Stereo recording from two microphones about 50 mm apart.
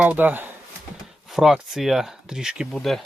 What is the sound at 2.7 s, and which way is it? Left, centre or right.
Speech, centre.